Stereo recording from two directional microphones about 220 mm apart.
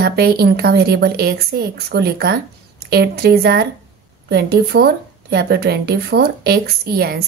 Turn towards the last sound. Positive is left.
turn(degrees=-45)  # may be behind; listen again after turning